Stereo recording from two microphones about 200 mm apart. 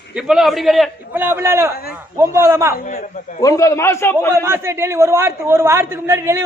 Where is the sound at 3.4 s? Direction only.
15° left (ahead or behind).